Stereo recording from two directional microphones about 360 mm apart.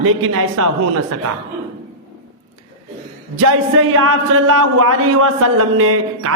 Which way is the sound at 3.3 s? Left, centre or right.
Right.